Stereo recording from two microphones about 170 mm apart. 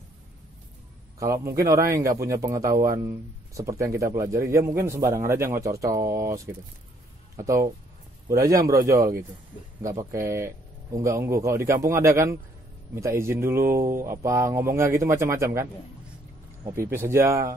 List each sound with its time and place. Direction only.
1.2 s speech: 20° right (ahead or behind)
16.6 s speech: 15° right (ahead or behind)